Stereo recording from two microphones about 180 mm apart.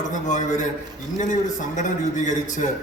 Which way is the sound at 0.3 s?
45° left (ahead or behind).